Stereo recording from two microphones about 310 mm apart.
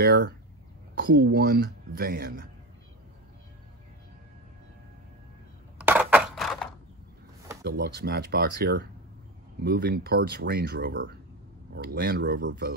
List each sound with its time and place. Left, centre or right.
0.0 s speech: right
5.8 s a sound: centre
7.6 s speech: right